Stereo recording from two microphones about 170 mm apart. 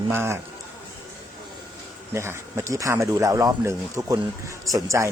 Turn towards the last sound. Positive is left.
turn(degrees=-20)  # may be behind; listen again after turning